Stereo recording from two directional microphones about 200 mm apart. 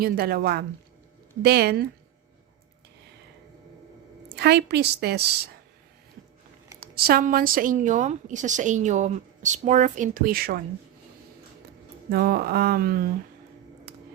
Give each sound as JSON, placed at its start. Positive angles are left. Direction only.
{"t": 0.0, "sound": "speech", "side_deg": -50}
{"t": 4.4, "sound": "a woman's voice", "side_deg": -55}
{"t": 6.7, "sound": "a woman's voice", "side_deg": -50}
{"t": 12.1, "sound": "speech", "side_deg": -50}